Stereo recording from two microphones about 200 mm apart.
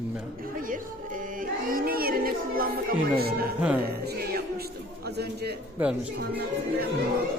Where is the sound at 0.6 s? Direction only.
45° right (ahead or behind).